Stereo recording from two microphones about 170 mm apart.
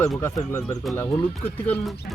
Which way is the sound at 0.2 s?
15° left (ahead or behind).